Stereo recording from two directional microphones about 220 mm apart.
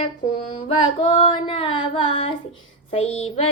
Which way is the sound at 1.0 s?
25° left (ahead or behind).